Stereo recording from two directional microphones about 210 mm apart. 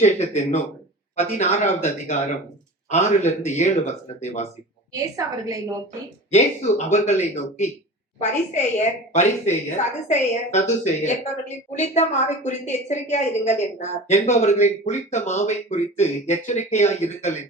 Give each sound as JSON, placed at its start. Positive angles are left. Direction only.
{"t": 0.0, "sound": "a woman's voice", "side_deg": 30}
{"t": 4.9, "sound": "a woman's voice", "side_deg": -15}
{"t": 6.3, "sound": "a woman's voice", "side_deg": 35}